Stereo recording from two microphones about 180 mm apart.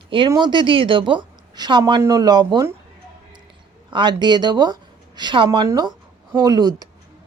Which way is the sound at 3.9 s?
25° right (ahead or behind).